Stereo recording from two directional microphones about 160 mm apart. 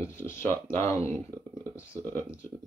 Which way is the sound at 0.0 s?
15° left (ahead or behind).